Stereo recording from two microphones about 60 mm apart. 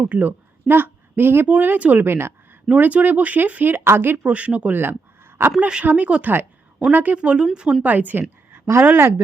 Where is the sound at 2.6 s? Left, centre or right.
Right.